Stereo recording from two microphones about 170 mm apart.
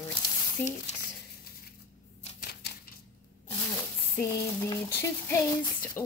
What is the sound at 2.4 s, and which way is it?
Typewriter, 70° left (ahead or behind).